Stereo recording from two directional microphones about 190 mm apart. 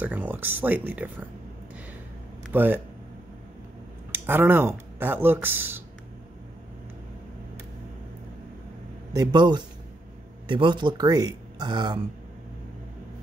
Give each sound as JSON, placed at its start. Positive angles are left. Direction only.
{"t": 0.0, "sound": "speech", "side_deg": -10}
{"t": 2.5, "sound": "speech", "side_deg": -10}
{"t": 4.1, "sound": "speech", "side_deg": -10}
{"t": 9.1, "sound": "speech", "side_deg": -20}